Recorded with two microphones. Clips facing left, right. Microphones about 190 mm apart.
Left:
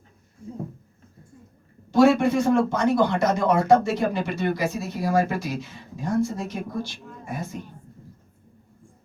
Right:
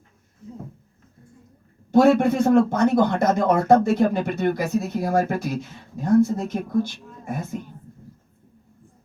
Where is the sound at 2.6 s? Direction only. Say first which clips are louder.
Right 2 dB; 50° right (ahead or behind).